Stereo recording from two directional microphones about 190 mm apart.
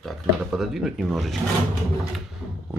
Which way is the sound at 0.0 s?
Centre (ahead or behind).